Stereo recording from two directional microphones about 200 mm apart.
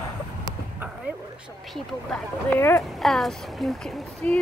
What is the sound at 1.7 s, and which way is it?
Speech, 5° left (ahead or behind).